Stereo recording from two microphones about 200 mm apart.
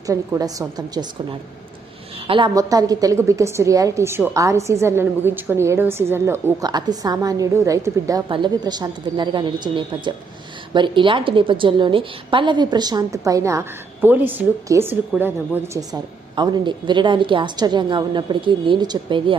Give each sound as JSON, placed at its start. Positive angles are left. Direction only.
{"t": 0.1, "sound": "a woman's voice", "side_deg": -15}